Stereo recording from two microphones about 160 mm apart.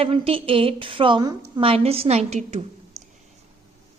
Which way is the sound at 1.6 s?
35° right (ahead or behind).